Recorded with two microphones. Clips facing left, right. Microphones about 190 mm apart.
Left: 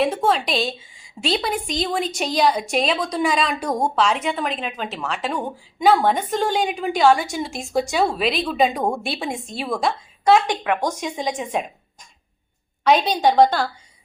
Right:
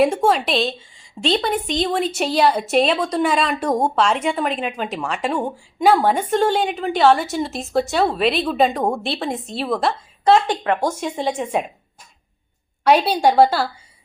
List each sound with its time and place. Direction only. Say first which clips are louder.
0.0 s a woman's voice: right 3 dB; 10° right (ahead or behind); by 10.8 s 10° left (ahead or behind)
10.8 s a woman's voice: right 2 dB; 10° right (ahead or behind)
12.8 s a woman's voice: right 2 dB; 10° right (ahead or behind)